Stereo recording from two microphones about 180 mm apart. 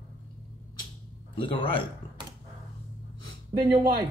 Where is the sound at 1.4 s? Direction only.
30° left (ahead or behind).